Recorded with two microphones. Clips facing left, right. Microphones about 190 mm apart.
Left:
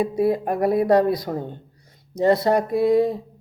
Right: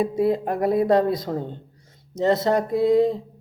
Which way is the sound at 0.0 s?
25° right (ahead or behind).